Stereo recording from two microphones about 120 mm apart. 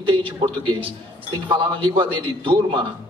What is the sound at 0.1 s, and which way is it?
A man's voice, 45° right (ahead or behind).